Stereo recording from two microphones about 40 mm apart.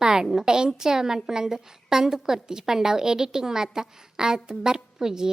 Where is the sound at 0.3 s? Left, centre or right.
Centre.